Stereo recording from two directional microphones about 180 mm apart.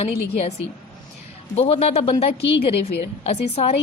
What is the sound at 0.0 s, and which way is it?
Speech, 35° left (ahead or behind).